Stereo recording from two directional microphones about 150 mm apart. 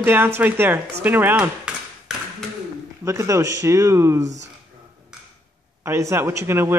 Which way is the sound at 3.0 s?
20° right (ahead or behind).